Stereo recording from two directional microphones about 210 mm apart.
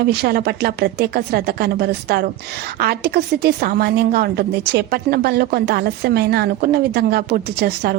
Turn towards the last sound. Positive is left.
turn(degrees=-50)  # may be behind; listen again after turning